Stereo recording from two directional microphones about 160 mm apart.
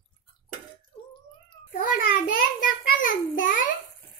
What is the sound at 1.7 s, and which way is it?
Child singing, 55° left (ahead or behind).